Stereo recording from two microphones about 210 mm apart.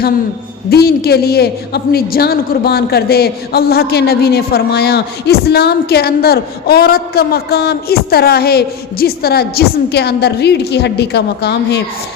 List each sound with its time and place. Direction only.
0.7 s a man's voice: 50° left (ahead or behind)